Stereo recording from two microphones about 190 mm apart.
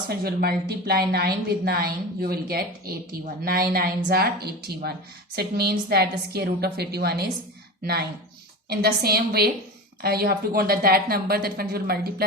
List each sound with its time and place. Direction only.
0.1 s a woman's voice: 55° right (ahead or behind)
8.7 s a woman's voice: 55° right (ahead or behind)